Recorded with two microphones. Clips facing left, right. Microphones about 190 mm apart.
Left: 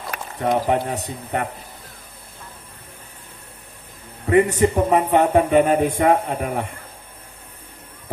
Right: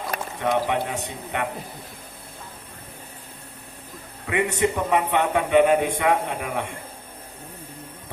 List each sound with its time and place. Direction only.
0.3 s a man's voice: 35° left (ahead or behind)
4.3 s a man's voice: 35° left (ahead or behind)